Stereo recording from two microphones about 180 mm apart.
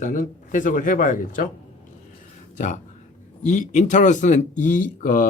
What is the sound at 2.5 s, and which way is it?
Speech, 45° left (ahead or behind).